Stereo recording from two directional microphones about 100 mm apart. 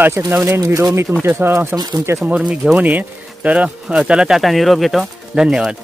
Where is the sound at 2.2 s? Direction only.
10° right (ahead or behind).